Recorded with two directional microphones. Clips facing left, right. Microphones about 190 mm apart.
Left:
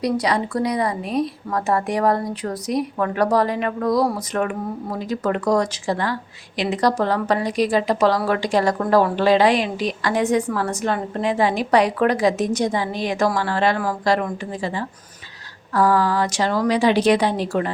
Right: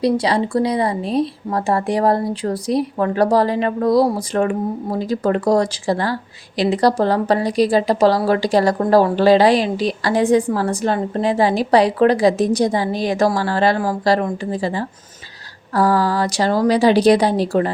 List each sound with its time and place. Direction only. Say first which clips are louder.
0.0 s speech: right 4 dB; 30° right (ahead or behind)